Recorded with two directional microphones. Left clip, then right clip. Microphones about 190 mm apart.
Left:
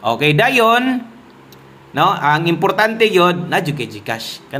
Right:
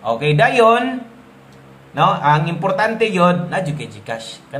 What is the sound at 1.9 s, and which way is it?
A man's voice, 40° left (ahead or behind).